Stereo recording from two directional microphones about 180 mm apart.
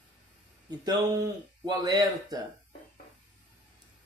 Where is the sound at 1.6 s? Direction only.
25° right (ahead or behind).